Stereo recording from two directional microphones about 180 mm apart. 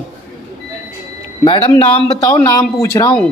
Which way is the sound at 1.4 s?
25° left (ahead or behind).